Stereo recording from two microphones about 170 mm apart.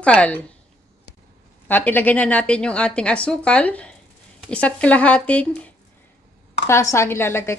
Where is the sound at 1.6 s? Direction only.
10° left (ahead or behind).